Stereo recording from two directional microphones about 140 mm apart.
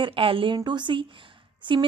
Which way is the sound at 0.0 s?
40° right (ahead or behind).